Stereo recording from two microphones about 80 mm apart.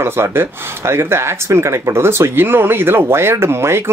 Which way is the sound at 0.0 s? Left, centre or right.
Right.